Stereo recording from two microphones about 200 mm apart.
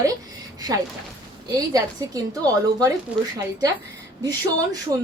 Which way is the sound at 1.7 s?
20° right (ahead or behind).